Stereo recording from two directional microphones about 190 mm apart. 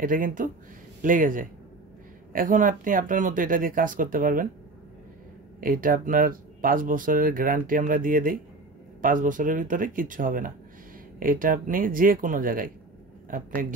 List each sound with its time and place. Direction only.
0.0 s speech: 45° right (ahead or behind)
5.6 s speech: 50° right (ahead or behind)